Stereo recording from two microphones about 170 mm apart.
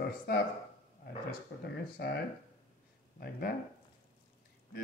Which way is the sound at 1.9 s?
70° left (ahead or behind).